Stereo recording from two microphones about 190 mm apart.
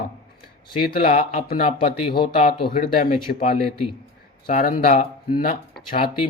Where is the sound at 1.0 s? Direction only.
40° left (ahead or behind).